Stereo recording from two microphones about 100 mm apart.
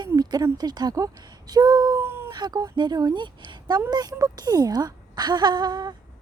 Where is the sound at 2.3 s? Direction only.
40° right (ahead or behind).